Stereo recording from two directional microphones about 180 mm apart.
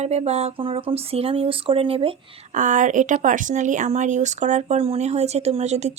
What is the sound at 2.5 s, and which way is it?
Speech, 45° right (ahead or behind).